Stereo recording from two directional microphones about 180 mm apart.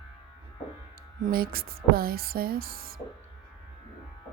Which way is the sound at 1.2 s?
55° right (ahead or behind).